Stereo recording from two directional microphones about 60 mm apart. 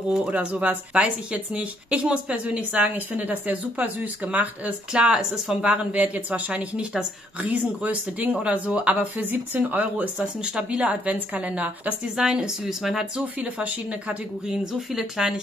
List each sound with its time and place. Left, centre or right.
0.1 s speech: right
10.1 s speech: centre
12.2 s speech: centre
13.4 s speech: right
14.5 s speech: centre